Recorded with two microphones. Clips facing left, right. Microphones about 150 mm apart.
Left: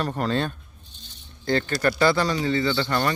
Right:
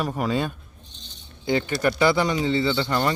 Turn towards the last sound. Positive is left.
turn(degrees=-20)  # may be behind; listen again after turning